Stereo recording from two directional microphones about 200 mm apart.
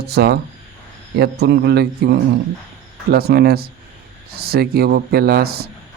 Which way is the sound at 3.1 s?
50° right (ahead or behind).